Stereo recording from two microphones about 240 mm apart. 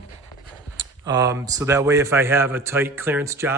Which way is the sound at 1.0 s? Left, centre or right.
Centre.